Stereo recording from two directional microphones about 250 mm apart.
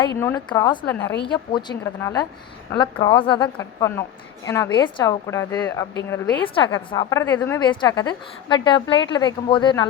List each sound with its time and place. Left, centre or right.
0.2 s a woman's voice: centre
1.2 s a woman's voice: centre